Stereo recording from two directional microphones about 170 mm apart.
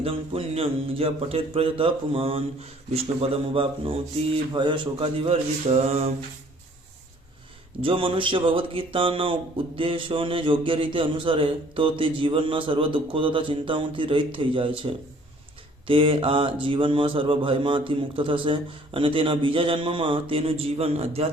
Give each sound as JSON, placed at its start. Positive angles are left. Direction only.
{"t": 0.0, "sound": "speech", "side_deg": -35}
{"t": 7.8, "sound": "speech", "side_deg": -30}